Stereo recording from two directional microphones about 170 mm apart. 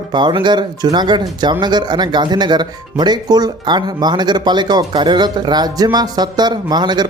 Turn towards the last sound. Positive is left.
turn(degrees=-25)  # may be behind; listen again after turning